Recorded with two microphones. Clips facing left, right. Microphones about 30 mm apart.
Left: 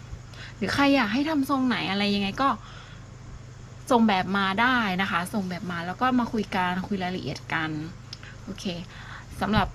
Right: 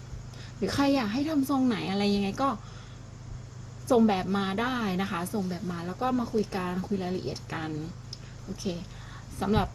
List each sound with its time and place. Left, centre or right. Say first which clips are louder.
0.3 s a woman's voice: left 3 dB; left
1.4 s speech: left 2 dB; left
3.8 s a woman's voice: left 2 dB; left